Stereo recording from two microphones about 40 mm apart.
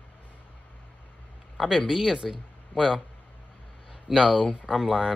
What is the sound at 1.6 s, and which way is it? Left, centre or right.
Speech, centre.